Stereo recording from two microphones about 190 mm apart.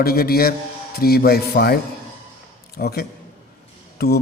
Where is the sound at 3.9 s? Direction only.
55° left (ahead or behind).